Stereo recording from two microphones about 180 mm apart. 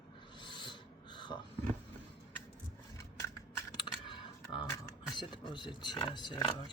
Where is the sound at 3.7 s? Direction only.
25° left (ahead or behind).